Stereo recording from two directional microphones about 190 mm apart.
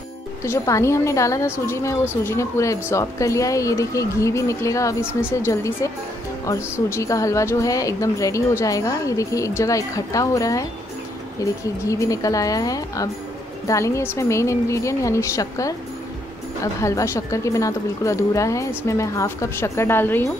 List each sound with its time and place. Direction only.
0.4 s speech: 15° left (ahead or behind)
16.8 s speech: 15° left (ahead or behind)